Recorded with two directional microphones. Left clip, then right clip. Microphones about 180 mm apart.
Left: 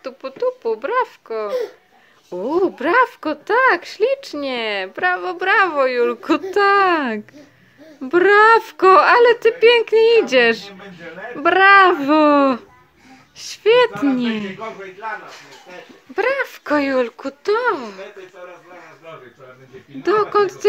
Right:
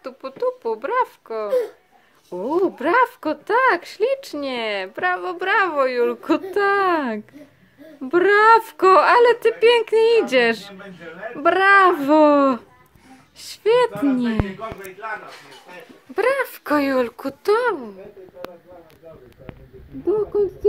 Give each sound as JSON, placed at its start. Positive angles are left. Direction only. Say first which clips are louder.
{"t": 0.0, "sound": "speech", "louder": "left 2 dB", "side_deg": 0}
{"t": 16.2, "sound": "speech", "louder": "left 1 dB", "side_deg": 0}
{"t": 20.1, "sound": "speech", "louder": "left 4 dB", "side_deg": 50}